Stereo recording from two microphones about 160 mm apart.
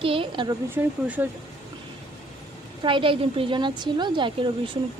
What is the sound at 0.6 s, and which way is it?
Speech, 10° right (ahead or behind).